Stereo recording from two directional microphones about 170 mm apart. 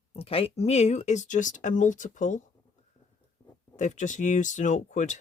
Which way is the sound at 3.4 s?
25° left (ahead or behind).